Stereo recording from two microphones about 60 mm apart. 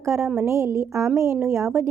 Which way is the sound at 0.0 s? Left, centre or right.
Right.